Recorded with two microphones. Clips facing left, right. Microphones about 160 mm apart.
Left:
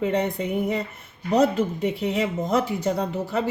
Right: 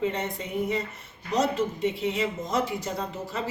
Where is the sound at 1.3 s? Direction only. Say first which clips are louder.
Left 5 dB; 60° left (ahead or behind).